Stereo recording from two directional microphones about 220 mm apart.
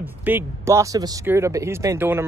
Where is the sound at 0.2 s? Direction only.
10° right (ahead or behind).